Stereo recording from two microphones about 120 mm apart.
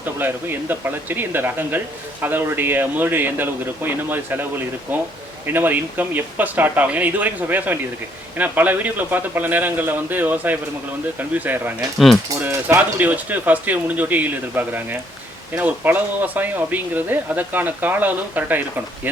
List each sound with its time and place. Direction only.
0.0 s speech: 15° right (ahead or behind)